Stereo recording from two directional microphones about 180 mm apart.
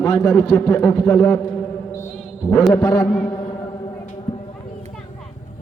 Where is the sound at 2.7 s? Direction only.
20° left (ahead or behind).